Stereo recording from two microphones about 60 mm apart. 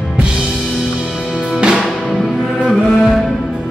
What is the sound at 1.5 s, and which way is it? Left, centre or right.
Music, centre.